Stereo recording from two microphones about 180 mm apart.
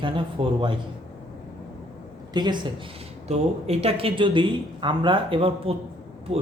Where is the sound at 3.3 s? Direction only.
35° right (ahead or behind).